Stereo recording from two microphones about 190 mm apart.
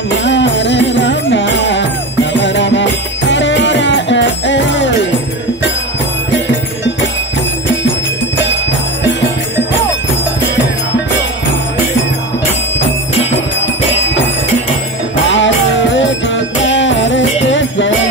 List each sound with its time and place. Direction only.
0.1 s music: 70° left (ahead or behind)
15.2 s music: 75° left (ahead or behind)